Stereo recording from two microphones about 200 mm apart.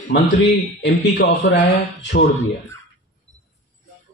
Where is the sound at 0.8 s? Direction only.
60° left (ahead or behind).